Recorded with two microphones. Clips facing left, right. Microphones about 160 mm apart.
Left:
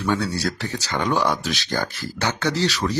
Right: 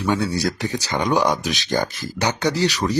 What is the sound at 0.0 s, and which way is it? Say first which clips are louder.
Speech: right 2 dB; 15° right (ahead or behind).